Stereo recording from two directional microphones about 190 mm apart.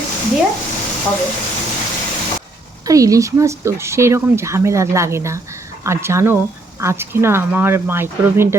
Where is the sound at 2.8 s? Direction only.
15° right (ahead or behind).